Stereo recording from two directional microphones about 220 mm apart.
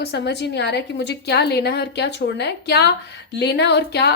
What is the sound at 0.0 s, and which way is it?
A woman's voice, 50° left (ahead or behind).